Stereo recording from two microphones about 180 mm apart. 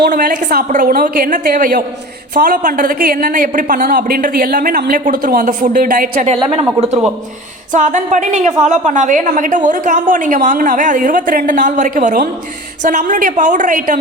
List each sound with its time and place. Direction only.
0.1 s a woman's voice: 50° right (ahead or behind)
6.3 s a woman's voice: 30° right (ahead or behind); by 14.0 s 45° right (ahead or behind)